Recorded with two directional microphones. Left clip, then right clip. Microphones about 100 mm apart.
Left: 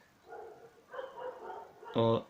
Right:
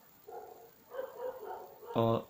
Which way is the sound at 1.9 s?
30° right (ahead or behind).